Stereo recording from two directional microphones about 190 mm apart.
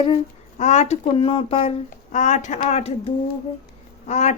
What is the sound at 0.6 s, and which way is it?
Speech, 40° left (ahead or behind).